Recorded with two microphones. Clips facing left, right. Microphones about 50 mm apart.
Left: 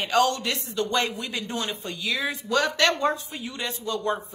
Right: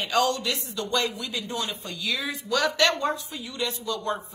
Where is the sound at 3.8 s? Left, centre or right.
Left.